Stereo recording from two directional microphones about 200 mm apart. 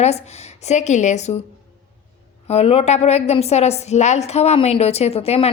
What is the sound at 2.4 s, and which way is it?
A woman's voice, 30° left (ahead or behind).